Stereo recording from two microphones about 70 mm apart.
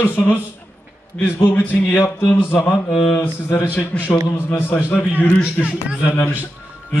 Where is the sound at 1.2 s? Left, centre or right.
Left.